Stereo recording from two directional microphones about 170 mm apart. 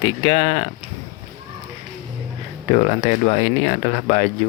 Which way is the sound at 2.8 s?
40° left (ahead or behind).